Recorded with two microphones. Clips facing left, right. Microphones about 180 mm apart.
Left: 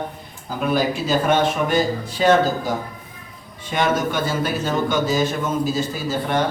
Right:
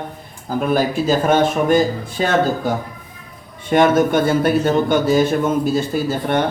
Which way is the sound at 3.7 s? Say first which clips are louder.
Right 7 dB; 55° right (ahead or behind).